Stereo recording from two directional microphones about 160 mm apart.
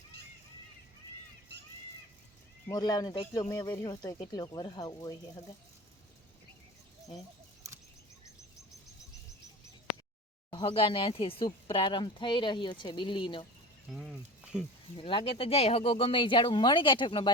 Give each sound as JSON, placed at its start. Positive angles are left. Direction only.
{"t": 2.6, "sound": "speech", "side_deg": 25}
{"t": 10.5, "sound": "speech", "side_deg": 30}
{"t": 13.9, "sound": "speech", "side_deg": 0}
{"t": 14.9, "sound": "speech", "side_deg": 30}